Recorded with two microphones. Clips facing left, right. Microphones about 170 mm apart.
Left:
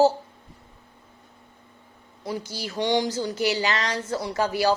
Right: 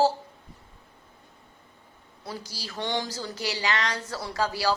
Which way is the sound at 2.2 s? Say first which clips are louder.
Left 7 dB; 20° left (ahead or behind).